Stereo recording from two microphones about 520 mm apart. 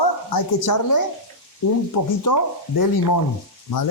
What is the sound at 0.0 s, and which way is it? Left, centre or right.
Speech, left.